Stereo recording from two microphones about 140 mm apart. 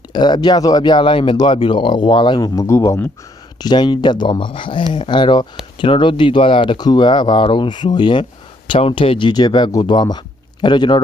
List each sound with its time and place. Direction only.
0.1 s speech: 30° left (ahead or behind)
3.6 s speech: 30° left (ahead or behind)